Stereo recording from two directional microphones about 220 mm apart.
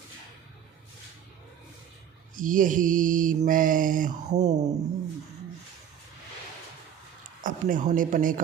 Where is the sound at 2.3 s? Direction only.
40° right (ahead or behind).